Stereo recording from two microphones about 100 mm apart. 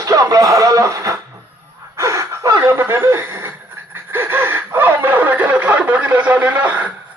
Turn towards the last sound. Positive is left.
turn(degrees=-15)  # may be behind; listen again after turning